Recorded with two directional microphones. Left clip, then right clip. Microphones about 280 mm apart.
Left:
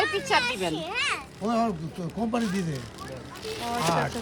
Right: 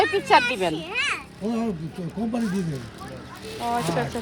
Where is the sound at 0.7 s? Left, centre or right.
Left.